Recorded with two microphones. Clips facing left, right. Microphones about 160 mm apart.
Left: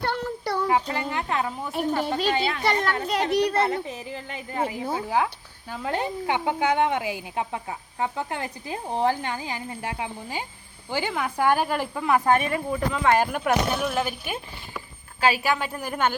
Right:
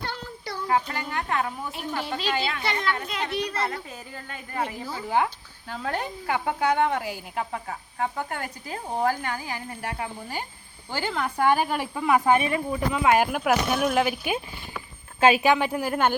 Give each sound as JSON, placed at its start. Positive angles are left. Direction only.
{"t": 0.0, "sound": "child singing", "side_deg": 65}
{"t": 0.7, "sound": "speech", "side_deg": 25}
{"t": 1.7, "sound": "a woman's voice", "side_deg": 40}
{"t": 2.3, "sound": "a woman's voice", "side_deg": 30}
{"t": 3.3, "sound": "a woman's voice", "side_deg": 65}
{"t": 3.8, "sound": "speech", "side_deg": 20}
{"t": 4.8, "sound": "speech", "side_deg": 65}
{"t": 5.0, "sound": "speech", "side_deg": 0}
{"t": 5.7, "sound": "a woman's voice", "side_deg": 15}